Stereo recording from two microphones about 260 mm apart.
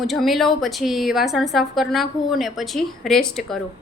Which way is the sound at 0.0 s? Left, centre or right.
Centre.